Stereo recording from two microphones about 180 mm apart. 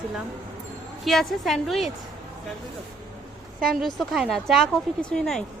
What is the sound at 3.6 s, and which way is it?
Speech, centre (ahead or behind).